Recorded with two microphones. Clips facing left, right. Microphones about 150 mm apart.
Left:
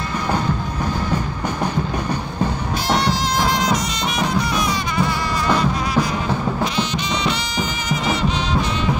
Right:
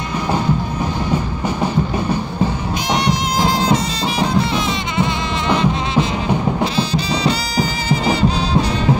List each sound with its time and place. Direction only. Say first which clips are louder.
3.3 s music: right 5 dB; 30° right (ahead or behind)